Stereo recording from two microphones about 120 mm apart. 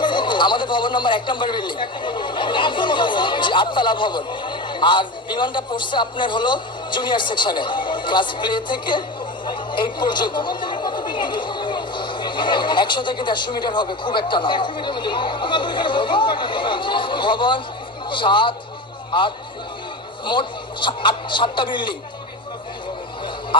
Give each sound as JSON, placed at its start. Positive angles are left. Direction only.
{"t": 0.0, "sound": "a man's voice", "side_deg": 40}
{"t": 20.2, "sound": "a man's voice", "side_deg": 40}